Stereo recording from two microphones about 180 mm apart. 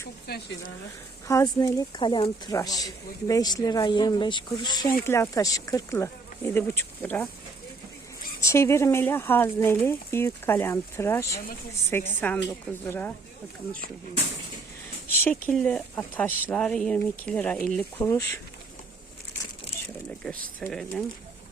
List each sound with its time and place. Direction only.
0.3 s speech: 65° left (ahead or behind)
1.3 s speech: 15° left (ahead or behind)
8.4 s speech: 15° left (ahead or behind)
15.0 s speech: 10° left (ahead or behind)
18.0 s speech: 15° left (ahead or behind)
20.6 s speech: 5° left (ahead or behind)